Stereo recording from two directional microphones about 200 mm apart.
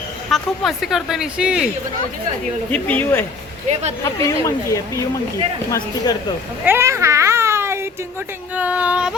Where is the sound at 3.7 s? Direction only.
35° right (ahead or behind).